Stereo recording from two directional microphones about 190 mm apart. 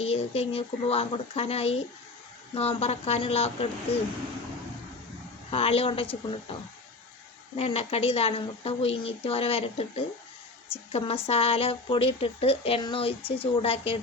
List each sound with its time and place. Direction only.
0.0 s a woman's voice: 30° left (ahead or behind)
5.5 s a woman's voice: 30° left (ahead or behind)